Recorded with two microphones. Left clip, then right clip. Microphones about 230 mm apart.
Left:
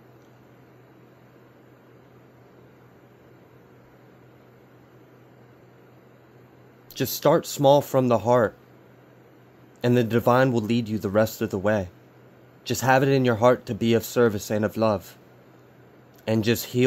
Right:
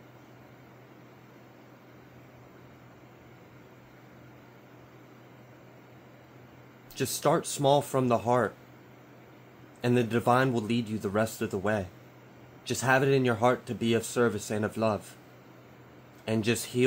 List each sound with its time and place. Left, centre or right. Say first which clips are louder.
6.9 s speech: left 6 dB; left
9.8 s speech: left 5 dB; left
16.3 s speech: left 5 dB; left